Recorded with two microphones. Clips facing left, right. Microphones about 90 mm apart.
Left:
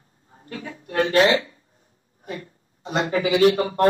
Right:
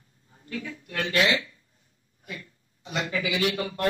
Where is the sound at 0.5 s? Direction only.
40° left (ahead or behind).